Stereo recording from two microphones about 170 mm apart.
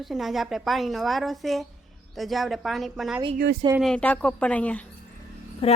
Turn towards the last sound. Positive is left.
turn(degrees=35)  # may be behind; listen again after turning